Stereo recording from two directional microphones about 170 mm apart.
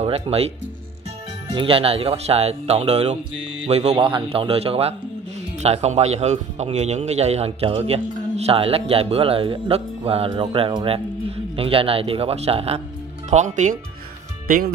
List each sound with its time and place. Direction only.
0.0 s speech: 35° right (ahead or behind)
1.5 s a man's voice: 30° right (ahead or behind)